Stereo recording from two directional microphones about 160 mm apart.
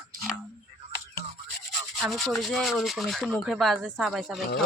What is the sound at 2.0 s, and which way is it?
Speech, centre (ahead or behind).